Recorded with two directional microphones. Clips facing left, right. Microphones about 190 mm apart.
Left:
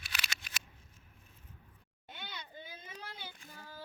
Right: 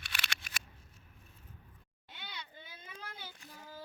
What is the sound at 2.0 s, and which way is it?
Children playing, 50° left (ahead or behind).